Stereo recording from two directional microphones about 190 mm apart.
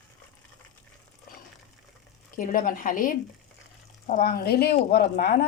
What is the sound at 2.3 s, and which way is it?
Speech, 45° left (ahead or behind).